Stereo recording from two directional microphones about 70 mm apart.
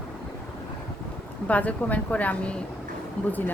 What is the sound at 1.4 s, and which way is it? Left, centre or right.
Speech, left.